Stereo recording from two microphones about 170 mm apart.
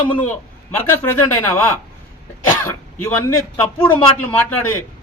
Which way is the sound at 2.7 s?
15° left (ahead or behind).